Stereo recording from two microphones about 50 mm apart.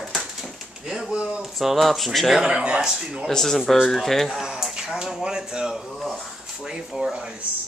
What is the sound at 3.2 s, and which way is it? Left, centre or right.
Speech, centre.